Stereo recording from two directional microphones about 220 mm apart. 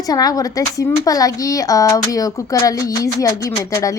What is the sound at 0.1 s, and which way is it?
Speech, 15° left (ahead or behind).